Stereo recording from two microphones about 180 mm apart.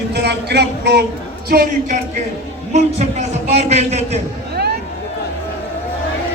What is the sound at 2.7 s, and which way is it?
A man's voice, 35° right (ahead or behind).